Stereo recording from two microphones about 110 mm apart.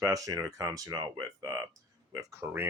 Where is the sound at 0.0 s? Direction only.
30° right (ahead or behind).